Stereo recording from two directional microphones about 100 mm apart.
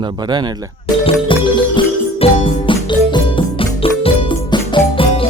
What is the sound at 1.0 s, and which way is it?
Music, 60° left (ahead or behind).